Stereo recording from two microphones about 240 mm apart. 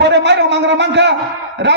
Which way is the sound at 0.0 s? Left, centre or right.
Right.